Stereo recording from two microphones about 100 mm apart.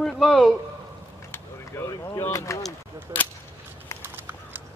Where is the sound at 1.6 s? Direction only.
30° left (ahead or behind).